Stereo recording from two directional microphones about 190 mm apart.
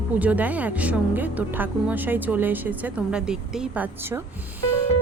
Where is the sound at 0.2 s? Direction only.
10° right (ahead or behind).